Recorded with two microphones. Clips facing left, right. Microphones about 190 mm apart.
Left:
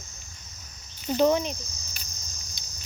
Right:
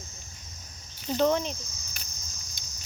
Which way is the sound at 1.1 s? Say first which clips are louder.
Left 3 dB; 10° left (ahead or behind).